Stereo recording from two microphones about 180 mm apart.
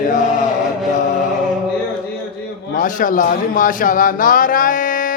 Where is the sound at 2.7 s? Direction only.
45° left (ahead or behind).